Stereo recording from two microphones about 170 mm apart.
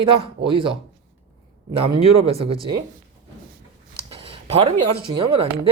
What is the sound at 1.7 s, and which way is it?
Speech, 35° right (ahead or behind).